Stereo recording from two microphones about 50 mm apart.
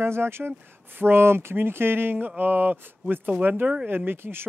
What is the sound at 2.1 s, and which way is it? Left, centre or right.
Speech, right.